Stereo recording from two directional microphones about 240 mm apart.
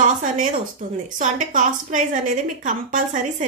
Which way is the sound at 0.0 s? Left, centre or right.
Right.